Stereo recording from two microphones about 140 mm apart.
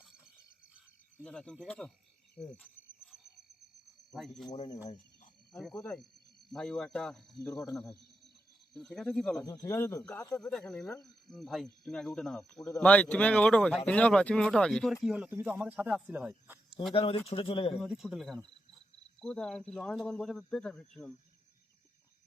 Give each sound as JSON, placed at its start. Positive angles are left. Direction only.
{"t": 1.2, "sound": "speech", "side_deg": 5}
{"t": 2.3, "sound": "frog", "side_deg": 5}
{"t": 4.1, "sound": "speech", "side_deg": 0}
{"t": 5.5, "sound": "speech", "side_deg": 5}
{"t": 8.7, "sound": "speech", "side_deg": 0}
{"t": 9.4, "sound": "speech", "side_deg": 25}
{"t": 10.0, "sound": "speech", "side_deg": 10}
{"t": 15.0, "sound": "speech", "side_deg": -5}
{"t": 16.9, "sound": "speech", "side_deg": 40}
{"t": 17.7, "sound": "speech", "side_deg": -5}